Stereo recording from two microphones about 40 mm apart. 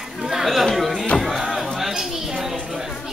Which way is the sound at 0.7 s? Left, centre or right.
Centre.